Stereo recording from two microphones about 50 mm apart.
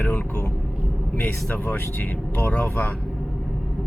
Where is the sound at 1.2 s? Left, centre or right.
Left.